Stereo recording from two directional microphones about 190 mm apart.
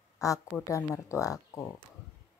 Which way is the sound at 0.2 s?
15° left (ahead or behind).